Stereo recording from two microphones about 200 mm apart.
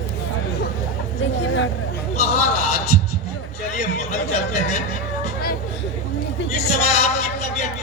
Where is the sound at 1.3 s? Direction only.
70° left (ahead or behind).